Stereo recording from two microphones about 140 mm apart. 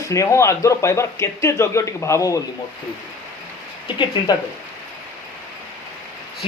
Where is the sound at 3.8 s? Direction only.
35° left (ahead or behind).